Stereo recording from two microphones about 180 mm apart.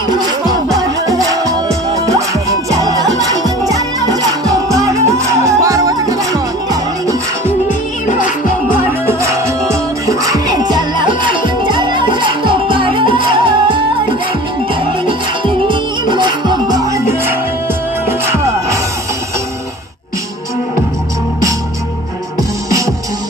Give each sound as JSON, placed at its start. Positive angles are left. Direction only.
{"t": 0.1, "sound": "music", "side_deg": -20}
{"t": 9.0, "sound": "music", "side_deg": -15}
{"t": 15.0, "sound": "music", "side_deg": -25}